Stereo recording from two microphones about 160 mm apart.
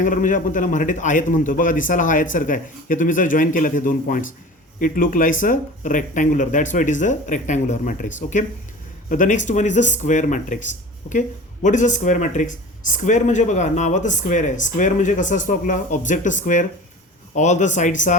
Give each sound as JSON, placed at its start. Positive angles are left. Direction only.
{"t": 0.0, "sound": "a man's voice", "side_deg": 55}